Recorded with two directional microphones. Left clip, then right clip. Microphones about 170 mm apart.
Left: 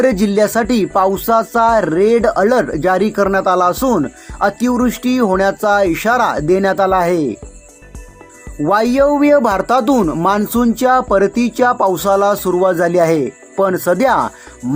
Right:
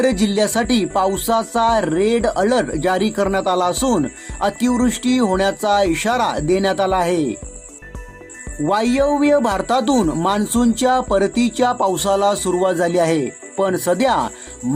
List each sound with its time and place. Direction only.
0.0 s speech: 20° left (ahead or behind)
8.6 s speech: 25° left (ahead or behind)